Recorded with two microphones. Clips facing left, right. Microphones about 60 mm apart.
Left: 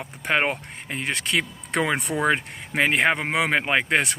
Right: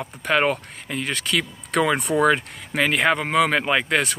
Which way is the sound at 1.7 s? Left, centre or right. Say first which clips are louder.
Right 4 dB; centre.